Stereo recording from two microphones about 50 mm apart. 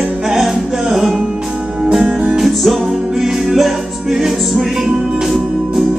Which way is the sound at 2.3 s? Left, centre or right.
Centre.